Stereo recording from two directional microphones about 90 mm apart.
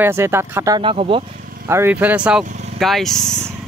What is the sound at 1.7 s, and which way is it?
Speech, 30° right (ahead or behind).